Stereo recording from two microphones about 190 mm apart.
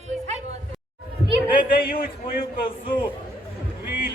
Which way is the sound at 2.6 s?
25° left (ahead or behind).